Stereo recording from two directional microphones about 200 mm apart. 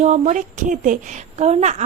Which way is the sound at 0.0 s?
35° right (ahead or behind).